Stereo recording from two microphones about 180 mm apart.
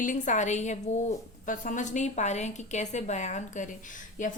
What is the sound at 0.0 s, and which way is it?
A woman's voice, 45° left (ahead or behind).